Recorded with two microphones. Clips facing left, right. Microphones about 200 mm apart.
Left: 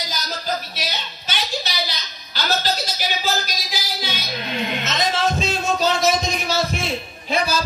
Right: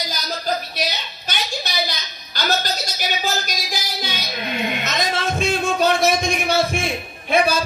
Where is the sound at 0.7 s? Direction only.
45° right (ahead or behind).